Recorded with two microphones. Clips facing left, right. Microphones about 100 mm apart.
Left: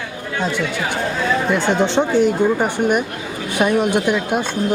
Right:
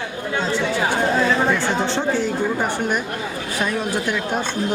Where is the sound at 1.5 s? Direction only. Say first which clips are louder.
Left 3 dB; 20° left (ahead or behind).